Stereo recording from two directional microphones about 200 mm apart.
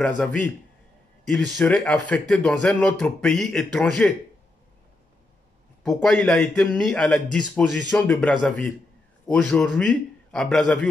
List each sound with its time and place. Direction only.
0.2 s a man's voice: 5° left (ahead or behind)
5.9 s speech: 5° left (ahead or behind)